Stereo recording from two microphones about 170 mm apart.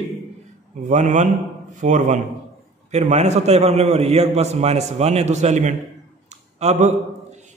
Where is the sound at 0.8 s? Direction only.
45° right (ahead or behind).